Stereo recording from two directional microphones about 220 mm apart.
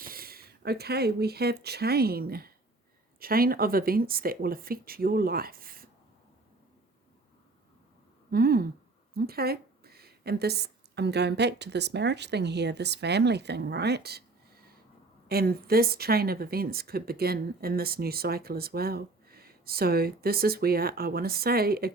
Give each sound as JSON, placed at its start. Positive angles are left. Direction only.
{"t": 0.0, "sound": "speech", "side_deg": -40}
{"t": 8.3, "sound": "speech", "side_deg": -45}
{"t": 15.3, "sound": "speech", "side_deg": -45}